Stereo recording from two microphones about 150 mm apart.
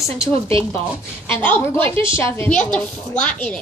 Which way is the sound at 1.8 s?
35° right (ahead or behind).